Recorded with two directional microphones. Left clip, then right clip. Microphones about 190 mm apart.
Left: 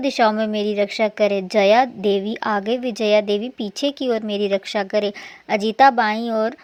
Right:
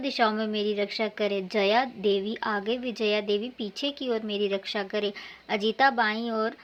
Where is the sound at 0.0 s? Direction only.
40° left (ahead or behind).